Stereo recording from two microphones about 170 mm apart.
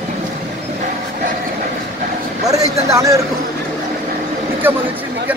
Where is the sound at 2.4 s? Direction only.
20° right (ahead or behind).